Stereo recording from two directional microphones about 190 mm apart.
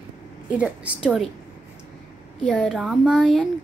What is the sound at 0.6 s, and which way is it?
Speech, centre (ahead or behind).